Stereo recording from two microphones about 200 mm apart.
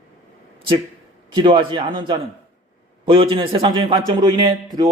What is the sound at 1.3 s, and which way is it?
A man's voice, 25° right (ahead or behind).